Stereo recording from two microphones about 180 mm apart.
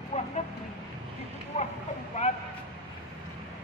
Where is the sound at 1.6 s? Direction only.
40° left (ahead or behind).